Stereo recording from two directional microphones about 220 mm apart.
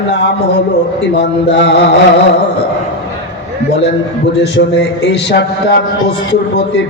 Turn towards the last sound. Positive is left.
turn(degrees=50)  # may be behind; listen again after turning